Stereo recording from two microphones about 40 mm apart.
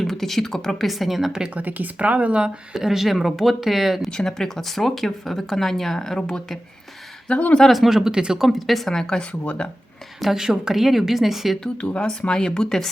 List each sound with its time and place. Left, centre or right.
0.0 s speech: centre
0.9 s a woman's voice: centre
1.5 s speech: right
2.7 s a woman's voice: centre
4.1 s speech: centre
7.3 s speech: left
7.7 s a woman's voice: centre
8.4 s a woman's voice: centre
8.9 s speech: centre
10.2 s a woman's voice: centre
11.8 s speech: left